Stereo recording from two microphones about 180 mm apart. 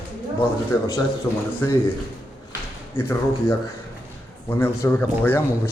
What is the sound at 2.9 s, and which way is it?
Speech, 15° left (ahead or behind).